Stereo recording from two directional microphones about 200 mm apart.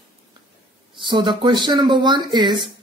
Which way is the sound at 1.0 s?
25° right (ahead or behind).